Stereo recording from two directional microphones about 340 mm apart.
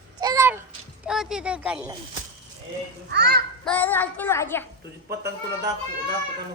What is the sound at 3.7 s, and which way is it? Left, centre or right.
Speech, centre.